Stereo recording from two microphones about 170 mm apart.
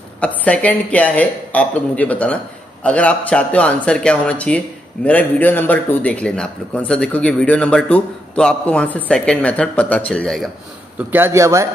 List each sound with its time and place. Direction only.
0.2 s a man's voice: 10° left (ahead or behind)
11.0 s speech: 10° right (ahead or behind)